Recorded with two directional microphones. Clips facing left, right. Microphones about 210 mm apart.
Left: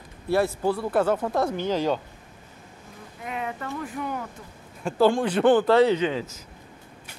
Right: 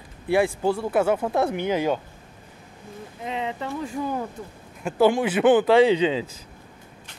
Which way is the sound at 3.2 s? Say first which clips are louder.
Right 3 dB; 25° right (ahead or behind).